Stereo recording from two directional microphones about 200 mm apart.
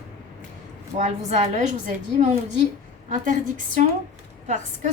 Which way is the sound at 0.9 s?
35° right (ahead or behind).